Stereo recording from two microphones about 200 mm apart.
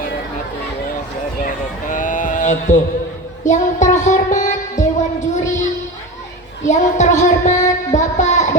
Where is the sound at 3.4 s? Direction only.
35° left (ahead or behind).